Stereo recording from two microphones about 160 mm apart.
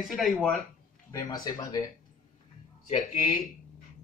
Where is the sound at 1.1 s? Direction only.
25° left (ahead or behind).